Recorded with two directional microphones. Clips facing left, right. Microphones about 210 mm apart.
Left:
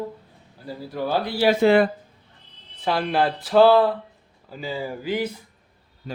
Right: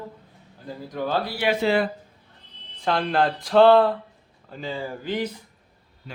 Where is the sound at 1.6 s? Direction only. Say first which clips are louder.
Left 6 dB; 55° left (ahead or behind).